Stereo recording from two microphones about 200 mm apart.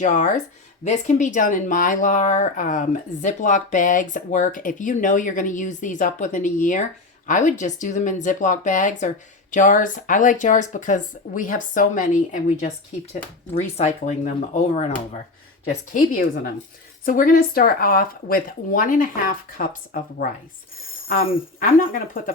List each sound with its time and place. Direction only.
0.0 s speech: 40° left (ahead or behind)
21.6 s speech: 40° left (ahead or behind)